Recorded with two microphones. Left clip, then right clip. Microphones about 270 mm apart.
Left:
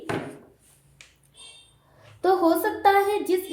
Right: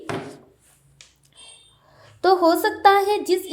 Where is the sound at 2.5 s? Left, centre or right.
Right.